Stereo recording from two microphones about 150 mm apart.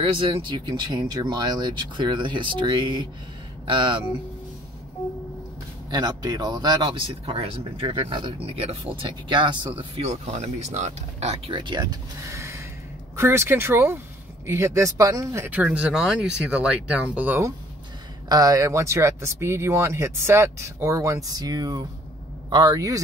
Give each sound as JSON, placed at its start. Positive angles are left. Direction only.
{"t": 0.0, "sound": "speech", "side_deg": -35}
{"t": 5.9, "sound": "speech", "side_deg": -25}
{"t": 18.3, "sound": "speech", "side_deg": -25}